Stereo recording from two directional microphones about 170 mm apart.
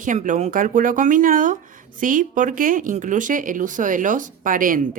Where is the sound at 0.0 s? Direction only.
50° right (ahead or behind).